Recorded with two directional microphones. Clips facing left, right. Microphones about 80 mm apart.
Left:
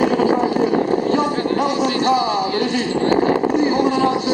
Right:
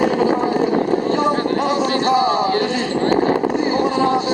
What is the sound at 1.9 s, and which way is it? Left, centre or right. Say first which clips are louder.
Speech: right 1 dB; right.